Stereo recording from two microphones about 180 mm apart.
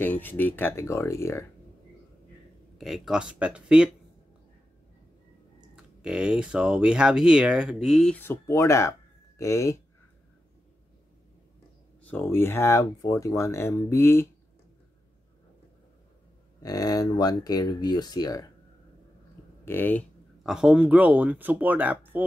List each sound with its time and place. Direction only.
0.0 s speech: 10° left (ahead or behind)
2.8 s speech: 5° right (ahead or behind)
5.8 s speech: 5° right (ahead or behind); by 9.8 s 15° left (ahead or behind)
12.0 s speech: 10° left (ahead or behind)
16.6 s speech: 20° left (ahead or behind)
19.6 s speech: 10° left (ahead or behind)
20.4 s speech: 5° right (ahead or behind)